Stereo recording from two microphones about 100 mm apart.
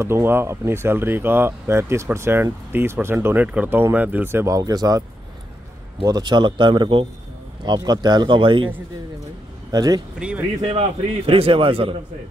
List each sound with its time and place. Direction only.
0.0 s speech: 25° right (ahead or behind)
4.6 s speech: 35° right (ahead or behind)
6.0 s a man's voice: 45° right (ahead or behind)
9.7 s a man's voice: 40° right (ahead or behind)
10.1 s speech: 10° right (ahead or behind)
10.7 s a man's voice: 85° right; by 11.9 s 65° right (ahead or behind)